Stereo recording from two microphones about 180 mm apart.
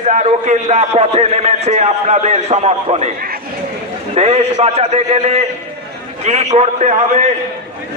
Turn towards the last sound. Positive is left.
turn(degrees=-40)  # may be behind; listen again after turning